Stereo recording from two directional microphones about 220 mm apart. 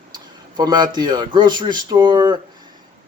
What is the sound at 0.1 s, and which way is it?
Speech, 20° right (ahead or behind).